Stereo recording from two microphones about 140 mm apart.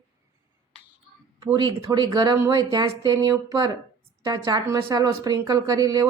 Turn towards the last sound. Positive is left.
turn(degrees=-25)  # may be behind; listen again after turning